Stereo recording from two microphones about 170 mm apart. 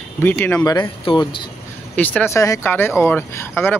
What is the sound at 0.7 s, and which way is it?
Speech, 25° left (ahead or behind).